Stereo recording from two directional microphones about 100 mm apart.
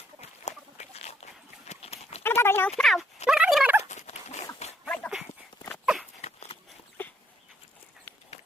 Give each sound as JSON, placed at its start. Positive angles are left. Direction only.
{"t": 0.9, "sound": "horse", "side_deg": 90}
{"t": 2.2, "sound": "clip-clop", "side_deg": 25}
{"t": 2.6, "sound": "speech", "side_deg": 5}
{"t": 3.2, "sound": "turkey", "side_deg": -5}
{"t": 4.9, "sound": "dog", "side_deg": 0}
{"t": 6.2, "sound": "a sound", "side_deg": 90}